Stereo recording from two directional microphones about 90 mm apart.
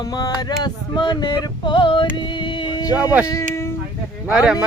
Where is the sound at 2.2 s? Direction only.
60° left (ahead or behind).